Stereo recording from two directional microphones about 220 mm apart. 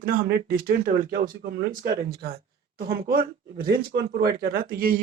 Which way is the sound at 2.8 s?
45° right (ahead or behind).